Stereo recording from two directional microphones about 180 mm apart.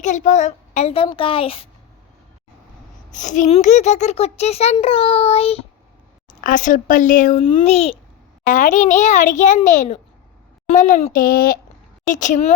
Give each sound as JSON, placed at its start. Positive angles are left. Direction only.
{"t": 0.0, "sound": "a child's voice", "side_deg": 40}
{"t": 3.1, "sound": "a child's voice", "side_deg": 45}
{"t": 6.4, "sound": "a child's voice", "side_deg": 45}
{"t": 7.4, "sound": "a child's voice", "side_deg": 35}
{"t": 8.4, "sound": "a child's voice", "side_deg": 45}